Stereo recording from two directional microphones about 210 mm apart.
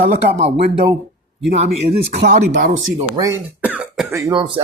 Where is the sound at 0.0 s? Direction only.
35° right (ahead or behind).